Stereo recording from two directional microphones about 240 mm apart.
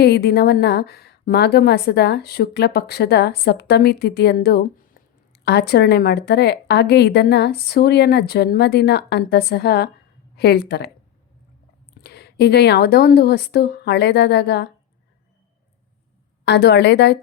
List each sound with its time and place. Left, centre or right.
0.0 s a woman's voice: left
12.0 s a woman's voice: left
16.5 s a woman's voice: left